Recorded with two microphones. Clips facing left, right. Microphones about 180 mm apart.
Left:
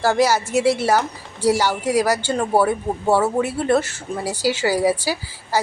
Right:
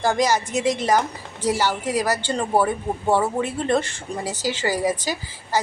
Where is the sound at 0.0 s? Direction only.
5° left (ahead or behind).